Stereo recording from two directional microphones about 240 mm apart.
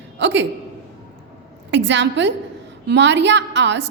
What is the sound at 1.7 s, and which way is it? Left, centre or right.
A woman's voice, right.